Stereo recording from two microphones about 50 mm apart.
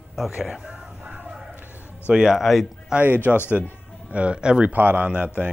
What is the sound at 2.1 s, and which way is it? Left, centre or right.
Speech, centre.